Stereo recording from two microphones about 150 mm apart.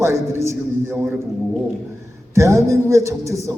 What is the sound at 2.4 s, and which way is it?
A man's voice, 20° right (ahead or behind).